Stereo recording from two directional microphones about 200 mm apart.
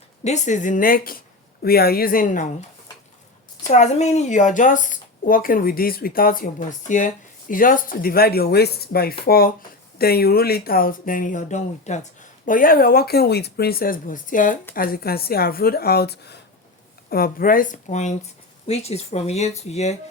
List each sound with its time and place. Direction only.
0.3 s a woman's voice: 35° left (ahead or behind)
3.7 s a woman's voice: 35° left (ahead or behind)